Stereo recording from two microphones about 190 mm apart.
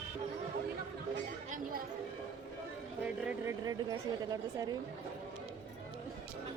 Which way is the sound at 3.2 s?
15° right (ahead or behind).